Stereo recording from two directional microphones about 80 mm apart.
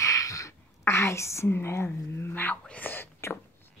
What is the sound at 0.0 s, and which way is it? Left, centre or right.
Whispering, left.